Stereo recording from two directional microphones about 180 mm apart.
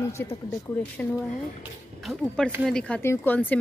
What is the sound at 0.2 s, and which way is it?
Speech, 15° left (ahead or behind).